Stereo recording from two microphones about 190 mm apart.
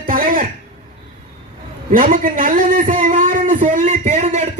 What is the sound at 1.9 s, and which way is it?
Speech, 45° right (ahead or behind).